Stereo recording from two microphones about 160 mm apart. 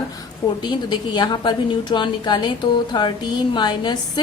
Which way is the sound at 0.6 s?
25° left (ahead or behind).